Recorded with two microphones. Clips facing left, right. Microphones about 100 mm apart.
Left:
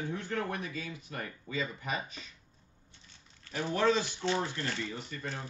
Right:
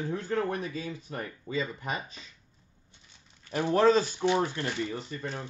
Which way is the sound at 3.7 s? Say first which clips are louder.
Right 6 dB; 40° right (ahead or behind).